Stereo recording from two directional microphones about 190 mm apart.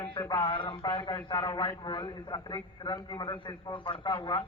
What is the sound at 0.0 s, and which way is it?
A man's voice, 25° left (ahead or behind).